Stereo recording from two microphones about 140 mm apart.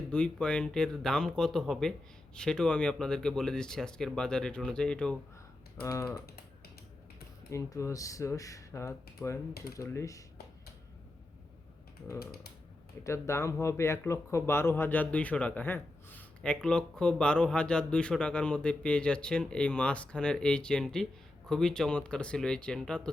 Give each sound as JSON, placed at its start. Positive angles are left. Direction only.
{"t": 0.1, "sound": "speech", "side_deg": 5}
{"t": 5.8, "sound": "speech", "side_deg": 20}
{"t": 7.5, "sound": "speech", "side_deg": 20}
{"t": 13.1, "sound": "speech", "side_deg": 20}